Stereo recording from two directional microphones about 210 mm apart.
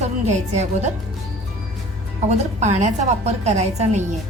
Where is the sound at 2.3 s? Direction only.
35° right (ahead or behind).